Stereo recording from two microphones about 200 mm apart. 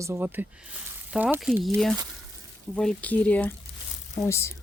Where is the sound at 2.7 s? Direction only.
5° left (ahead or behind).